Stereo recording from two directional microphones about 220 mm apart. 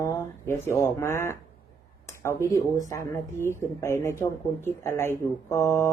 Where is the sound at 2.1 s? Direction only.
10° left (ahead or behind).